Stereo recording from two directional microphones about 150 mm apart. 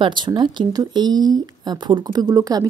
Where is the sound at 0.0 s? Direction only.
30° right (ahead or behind).